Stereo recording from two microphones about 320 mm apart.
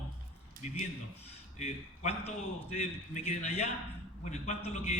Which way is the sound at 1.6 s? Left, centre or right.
Centre.